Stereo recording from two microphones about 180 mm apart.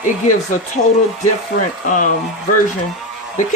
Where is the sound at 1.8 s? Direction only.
45° left (ahead or behind).